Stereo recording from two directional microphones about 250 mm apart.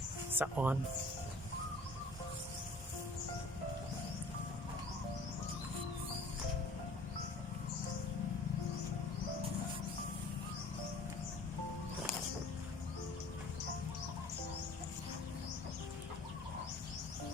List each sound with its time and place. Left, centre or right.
0.3 s speech: centre